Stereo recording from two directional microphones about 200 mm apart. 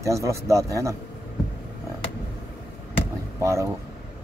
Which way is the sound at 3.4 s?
15° right (ahead or behind).